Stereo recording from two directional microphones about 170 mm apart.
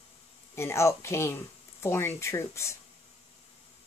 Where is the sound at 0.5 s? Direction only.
15° left (ahead or behind).